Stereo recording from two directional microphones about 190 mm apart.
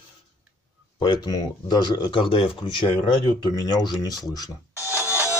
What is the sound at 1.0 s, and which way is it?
Speech, 20° left (ahead or behind).